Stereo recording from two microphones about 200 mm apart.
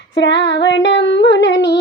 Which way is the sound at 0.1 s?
60° left (ahead or behind).